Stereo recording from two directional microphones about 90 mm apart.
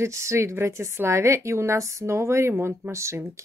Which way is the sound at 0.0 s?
30° right (ahead or behind).